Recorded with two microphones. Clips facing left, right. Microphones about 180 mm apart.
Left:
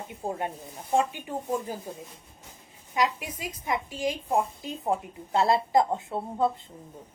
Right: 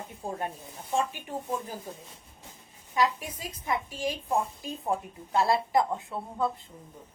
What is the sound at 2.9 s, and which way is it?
A woman's voice, 15° left (ahead or behind).